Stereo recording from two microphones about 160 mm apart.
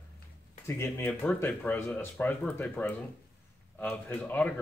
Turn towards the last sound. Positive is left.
turn(degrees=10)  # may be behind; listen again after turning